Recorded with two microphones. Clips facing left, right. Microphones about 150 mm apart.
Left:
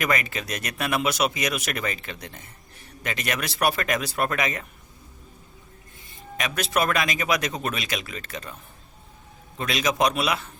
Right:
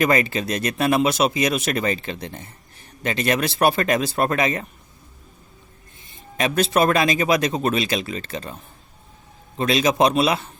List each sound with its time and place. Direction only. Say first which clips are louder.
0.0 s speech: right 7 dB; 30° right (ahead or behind)
6.3 s speech: right 6 dB; 30° right (ahead or behind)
9.6 s speech: right 6 dB; 30° right (ahead or behind)